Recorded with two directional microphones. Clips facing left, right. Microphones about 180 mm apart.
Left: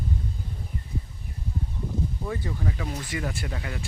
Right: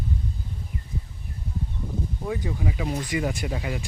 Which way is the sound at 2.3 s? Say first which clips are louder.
Right 6 dB; 10° right (ahead or behind).